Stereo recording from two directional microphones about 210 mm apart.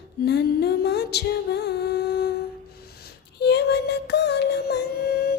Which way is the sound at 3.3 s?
55° left (ahead or behind).